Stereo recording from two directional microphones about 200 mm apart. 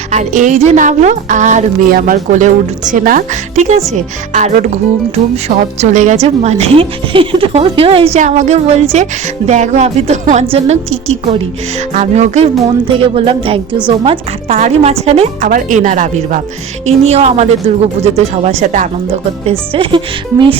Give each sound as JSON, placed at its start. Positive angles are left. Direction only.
{"t": 0.1, "sound": "a woman's voice", "side_deg": -40}
{"t": 15.4, "sound": "a woman's voice", "side_deg": -40}